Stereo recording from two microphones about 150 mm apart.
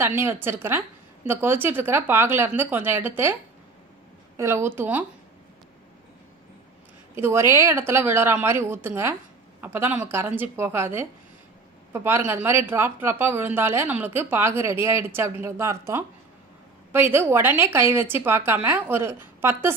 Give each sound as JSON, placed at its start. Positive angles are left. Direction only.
{"t": 0.0, "sound": "speech", "side_deg": -15}
{"t": 4.4, "sound": "speech", "side_deg": -15}
{"t": 7.2, "sound": "speech", "side_deg": -15}